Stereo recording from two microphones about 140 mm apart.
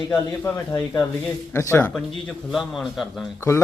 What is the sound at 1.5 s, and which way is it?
Speech, 15° left (ahead or behind).